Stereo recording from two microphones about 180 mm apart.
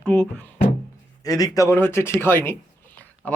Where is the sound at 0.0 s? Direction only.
5° left (ahead or behind).